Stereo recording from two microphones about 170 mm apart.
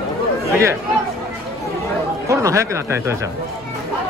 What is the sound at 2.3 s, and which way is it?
Speech, 20° right (ahead or behind).